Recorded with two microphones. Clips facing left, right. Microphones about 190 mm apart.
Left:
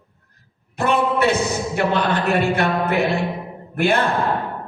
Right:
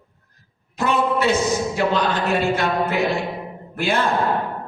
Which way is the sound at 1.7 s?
60° left (ahead or behind).